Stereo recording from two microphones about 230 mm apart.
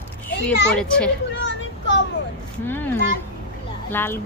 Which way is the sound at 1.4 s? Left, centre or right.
Left.